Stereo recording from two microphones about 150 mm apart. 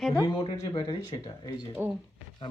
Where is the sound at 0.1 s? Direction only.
35° left (ahead or behind).